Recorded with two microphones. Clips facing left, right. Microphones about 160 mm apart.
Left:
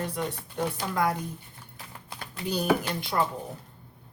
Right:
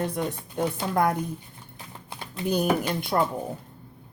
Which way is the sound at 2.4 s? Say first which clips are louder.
Right 2 dB; 55° right (ahead or behind).